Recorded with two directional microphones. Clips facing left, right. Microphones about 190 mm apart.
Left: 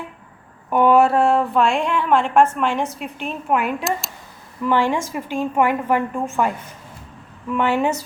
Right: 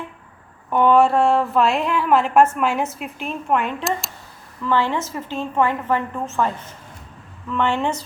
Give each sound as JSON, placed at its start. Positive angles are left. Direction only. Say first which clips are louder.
{"t": 0.7, "sound": "a woman's voice", "louder": "left 1 dB", "side_deg": 5}
{"t": 7.5, "sound": "a woman's voice", "louder": "left 2 dB", "side_deg": 10}